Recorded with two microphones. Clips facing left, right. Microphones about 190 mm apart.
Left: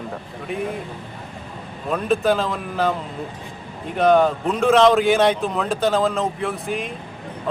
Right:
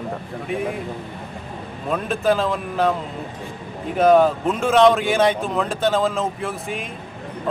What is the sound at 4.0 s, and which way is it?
Speech, centre (ahead or behind).